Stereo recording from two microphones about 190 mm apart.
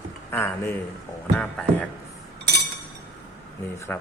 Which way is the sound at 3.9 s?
5° left (ahead or behind).